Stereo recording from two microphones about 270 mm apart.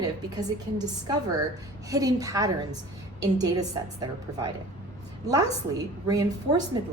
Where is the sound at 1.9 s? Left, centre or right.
Centre.